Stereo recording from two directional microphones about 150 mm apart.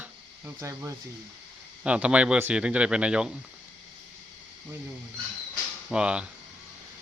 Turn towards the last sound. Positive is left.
turn(degrees=-5)  # may be behind; listen again after turning